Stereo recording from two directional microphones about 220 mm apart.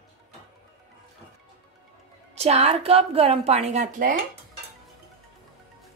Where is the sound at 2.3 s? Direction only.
30° right (ahead or behind).